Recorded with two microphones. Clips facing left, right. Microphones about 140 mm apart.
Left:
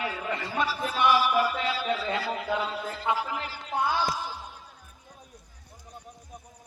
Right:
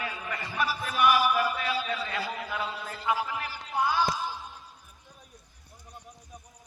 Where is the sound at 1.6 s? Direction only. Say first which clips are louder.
Left 2 dB; 25° left (ahead or behind).